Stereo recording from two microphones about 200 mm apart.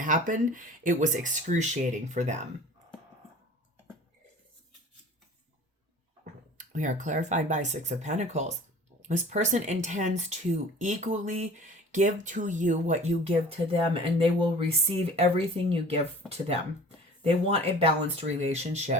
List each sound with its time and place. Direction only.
0.0 s speech: 40° right (ahead or behind)
6.6 s speech: 40° right (ahead or behind)
17.2 s speech: 30° right (ahead or behind)